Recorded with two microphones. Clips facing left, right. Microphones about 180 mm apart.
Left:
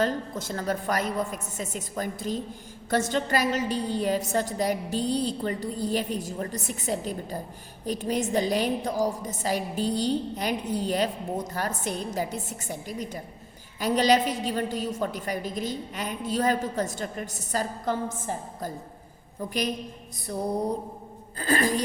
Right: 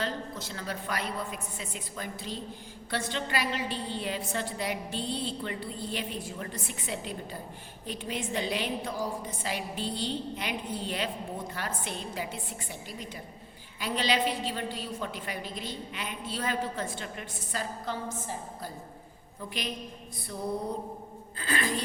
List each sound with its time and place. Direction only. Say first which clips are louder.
0.0 s a woman's voice: left 7 dB; 45° left (ahead or behind)